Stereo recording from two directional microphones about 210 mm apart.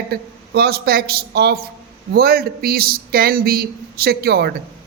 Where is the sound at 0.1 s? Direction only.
50° right (ahead or behind).